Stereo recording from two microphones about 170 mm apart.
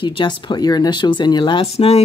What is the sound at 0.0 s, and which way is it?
Speech, 25° left (ahead or behind).